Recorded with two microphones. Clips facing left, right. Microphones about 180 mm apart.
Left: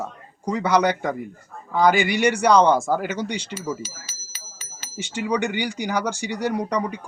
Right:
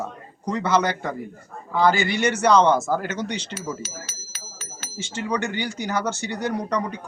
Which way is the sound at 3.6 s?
65° right (ahead or behind).